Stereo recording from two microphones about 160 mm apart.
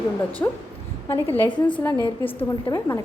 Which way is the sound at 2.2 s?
35° left (ahead or behind).